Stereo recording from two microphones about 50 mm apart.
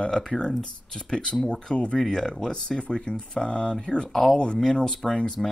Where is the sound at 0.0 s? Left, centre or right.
Centre.